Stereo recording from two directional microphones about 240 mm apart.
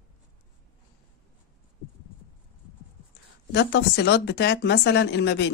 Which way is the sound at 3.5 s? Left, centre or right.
Left.